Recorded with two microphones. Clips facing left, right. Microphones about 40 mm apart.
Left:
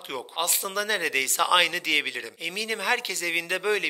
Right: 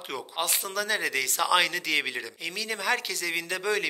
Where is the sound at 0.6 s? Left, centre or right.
Centre.